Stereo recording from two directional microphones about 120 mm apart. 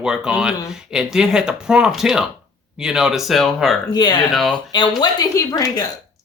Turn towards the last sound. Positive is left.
turn(degrees=25)  # may be behind; listen again after turning